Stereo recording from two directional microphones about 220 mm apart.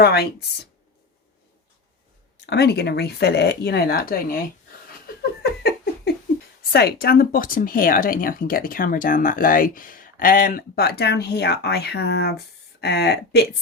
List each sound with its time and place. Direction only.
0.0 s speech: 45° left (ahead or behind)
2.5 s speech: 50° left (ahead or behind)
5.0 s a sound: 45° left (ahead or behind)
6.7 s speech: 45° left (ahead or behind)